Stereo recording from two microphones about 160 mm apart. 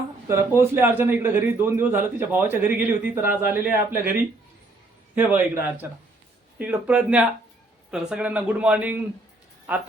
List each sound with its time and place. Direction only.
0.3 s a man's voice: 15° right (ahead or behind)
5.1 s a man's voice: 10° right (ahead or behind)